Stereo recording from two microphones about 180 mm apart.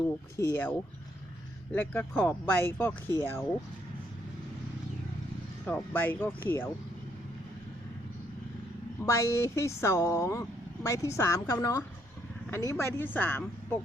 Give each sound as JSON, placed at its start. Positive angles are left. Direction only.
{"t": 0.3, "sound": "speech", "side_deg": 15}
{"t": 5.6, "sound": "speech", "side_deg": 10}
{"t": 9.0, "sound": "speech", "side_deg": 15}